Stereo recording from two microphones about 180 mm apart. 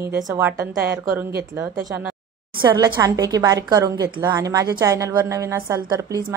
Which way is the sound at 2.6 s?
20° right (ahead or behind).